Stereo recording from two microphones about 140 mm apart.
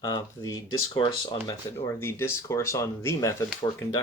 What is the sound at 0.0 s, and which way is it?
Speech, 25° left (ahead or behind).